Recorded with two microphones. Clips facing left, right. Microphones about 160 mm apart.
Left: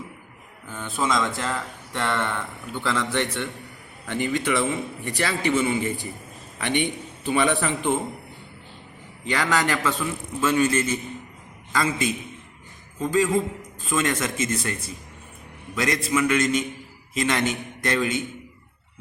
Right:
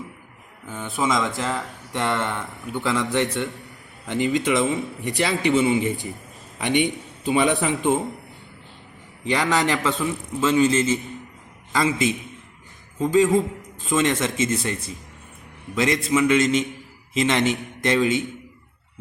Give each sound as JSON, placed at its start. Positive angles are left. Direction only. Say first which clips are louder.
{"t": 0.9, "sound": "a man's voice", "louder": "right 1 dB", "side_deg": -20}
{"t": 9.2, "sound": "a man's voice", "louder": "right 2 dB", "side_deg": -20}